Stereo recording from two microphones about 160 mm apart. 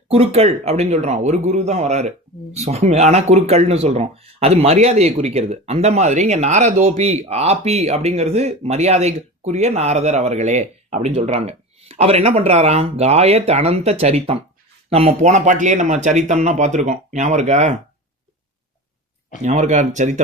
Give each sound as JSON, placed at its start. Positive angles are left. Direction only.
{"t": 0.1, "sound": "a man's voice", "side_deg": -40}
{"t": 19.4, "sound": "speech", "side_deg": -50}